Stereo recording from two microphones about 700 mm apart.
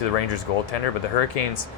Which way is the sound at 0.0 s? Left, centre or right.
Left.